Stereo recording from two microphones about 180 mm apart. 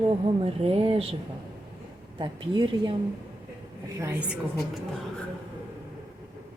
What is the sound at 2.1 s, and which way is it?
Speech, 25° right (ahead or behind).